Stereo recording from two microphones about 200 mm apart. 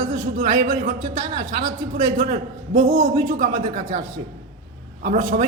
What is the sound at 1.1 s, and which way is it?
A man's voice, 40° right (ahead or behind).